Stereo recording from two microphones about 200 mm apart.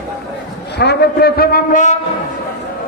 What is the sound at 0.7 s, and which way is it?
A man's voice, 55° left (ahead or behind).